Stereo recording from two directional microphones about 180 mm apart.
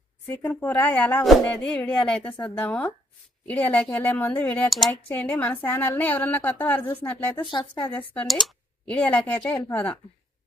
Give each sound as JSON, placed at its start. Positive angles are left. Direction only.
{"t": 0.3, "sound": "speech", "side_deg": 10}
{"t": 7.5, "sound": "speech", "side_deg": 25}
{"t": 7.9, "sound": "speech", "side_deg": 10}
{"t": 9.3, "sound": "speech", "side_deg": 20}